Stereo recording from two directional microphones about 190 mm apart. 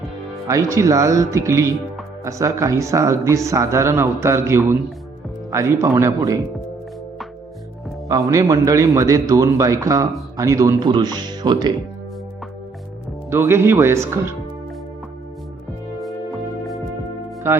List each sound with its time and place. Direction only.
0.4 s speech: 15° right (ahead or behind)
8.3 s speech: 20° right (ahead or behind)
13.3 s speech: 15° right (ahead or behind)